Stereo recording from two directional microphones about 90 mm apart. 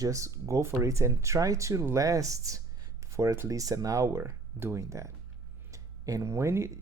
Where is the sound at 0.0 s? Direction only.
35° right (ahead or behind).